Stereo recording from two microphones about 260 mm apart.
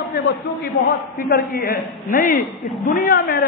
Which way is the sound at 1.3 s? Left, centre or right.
Left.